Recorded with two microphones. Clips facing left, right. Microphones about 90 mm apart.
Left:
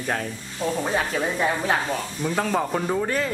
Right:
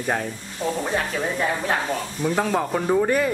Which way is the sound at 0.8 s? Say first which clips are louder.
Even; 5° left (ahead or behind).